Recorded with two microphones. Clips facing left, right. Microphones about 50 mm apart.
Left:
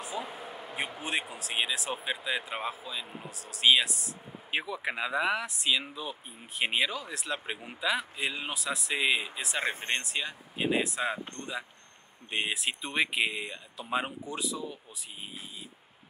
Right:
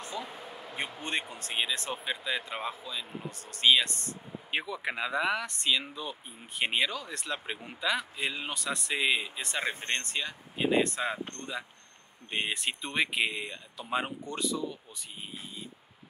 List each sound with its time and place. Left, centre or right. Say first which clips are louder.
0.0 s a sound: left 2 dB; centre
0.7 s speech: left 1 dB; centre
9.6 s speech: left 1 dB; left
9.8 s speech: left 1 dB; centre